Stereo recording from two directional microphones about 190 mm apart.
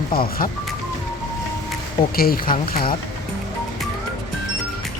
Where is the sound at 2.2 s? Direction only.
50° left (ahead or behind).